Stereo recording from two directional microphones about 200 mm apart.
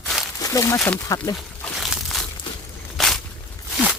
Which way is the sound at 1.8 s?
Centre (ahead or behind).